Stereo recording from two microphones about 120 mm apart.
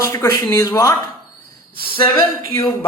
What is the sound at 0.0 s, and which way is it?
Speech, 25° left (ahead or behind).